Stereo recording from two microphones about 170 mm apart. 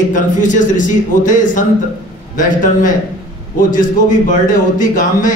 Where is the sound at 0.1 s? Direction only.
50° left (ahead or behind).